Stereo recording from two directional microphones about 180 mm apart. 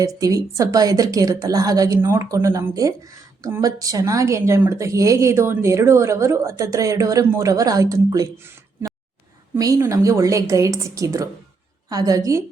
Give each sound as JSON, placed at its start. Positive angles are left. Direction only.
{"t": 0.0, "sound": "a woman's voice", "side_deg": -20}